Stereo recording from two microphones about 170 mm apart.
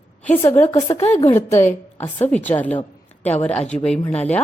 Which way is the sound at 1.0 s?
40° left (ahead or behind).